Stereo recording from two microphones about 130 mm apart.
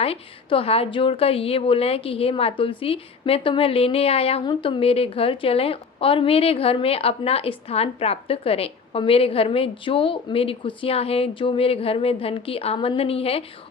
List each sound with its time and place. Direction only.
0.0 s a woman's voice: 50° left (ahead or behind)